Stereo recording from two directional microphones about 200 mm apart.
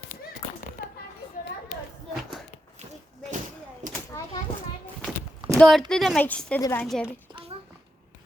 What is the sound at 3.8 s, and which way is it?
Children playing, 40° right (ahead or behind).